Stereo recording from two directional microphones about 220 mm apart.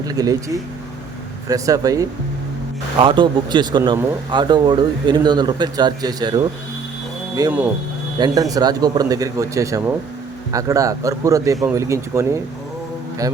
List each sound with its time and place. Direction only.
0.0 s speech: 15° right (ahead or behind)
7.3 s speech: 10° right (ahead or behind)